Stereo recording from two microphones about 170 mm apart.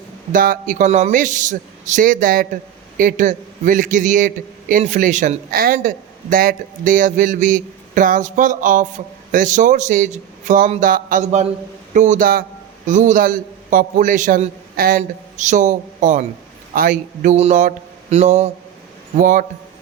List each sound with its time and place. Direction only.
0.3 s a man's voice: 55° right (ahead or behind)